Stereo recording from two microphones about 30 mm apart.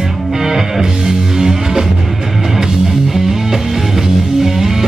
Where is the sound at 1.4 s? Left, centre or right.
Centre.